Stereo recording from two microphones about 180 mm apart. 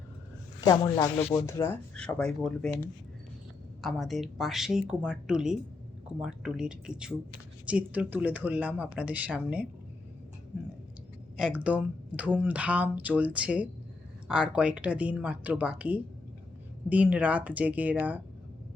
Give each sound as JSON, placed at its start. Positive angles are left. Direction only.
{"t": 0.6, "sound": "speech", "side_deg": 25}
{"t": 1.1, "sound": "speech", "side_deg": 10}
{"t": 11.3, "sound": "speech", "side_deg": -5}